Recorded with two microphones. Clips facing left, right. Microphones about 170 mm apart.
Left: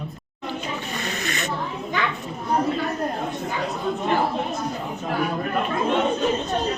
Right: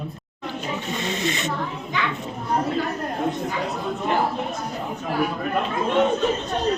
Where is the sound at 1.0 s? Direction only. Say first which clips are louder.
Right 5 dB; 25° right (ahead or behind).